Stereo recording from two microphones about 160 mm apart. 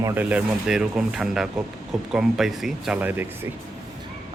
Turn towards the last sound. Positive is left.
turn(degrees=-10)  # may be behind; listen again after turning